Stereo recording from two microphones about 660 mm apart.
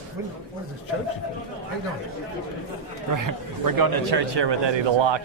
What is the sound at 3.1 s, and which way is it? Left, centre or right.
A man's voice, right.